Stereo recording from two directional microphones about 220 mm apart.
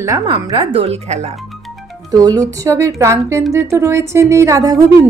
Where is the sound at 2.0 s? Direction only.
15° right (ahead or behind).